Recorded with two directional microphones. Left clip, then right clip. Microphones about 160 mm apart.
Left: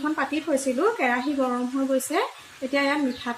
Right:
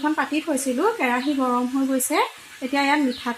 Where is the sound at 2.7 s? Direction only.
55° right (ahead or behind).